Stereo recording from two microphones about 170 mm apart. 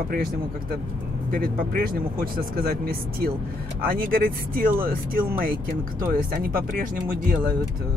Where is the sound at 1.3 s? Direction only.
60° right (ahead or behind).